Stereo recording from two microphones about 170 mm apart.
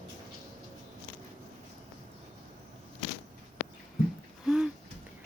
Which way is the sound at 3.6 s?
50° left (ahead or behind).